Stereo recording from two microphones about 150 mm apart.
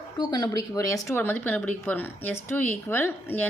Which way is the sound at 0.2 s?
30° left (ahead or behind).